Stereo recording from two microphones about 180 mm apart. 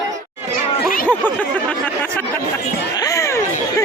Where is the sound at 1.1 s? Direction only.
10° left (ahead or behind).